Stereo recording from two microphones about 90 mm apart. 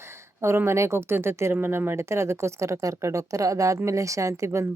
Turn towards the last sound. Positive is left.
turn(degrees=-30)  # may be behind; listen again after turning